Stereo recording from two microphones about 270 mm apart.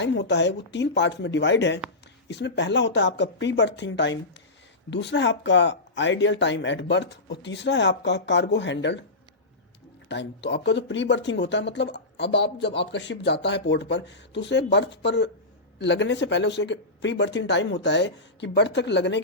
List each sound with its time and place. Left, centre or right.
0.0 s speech: left
10.1 s speech: left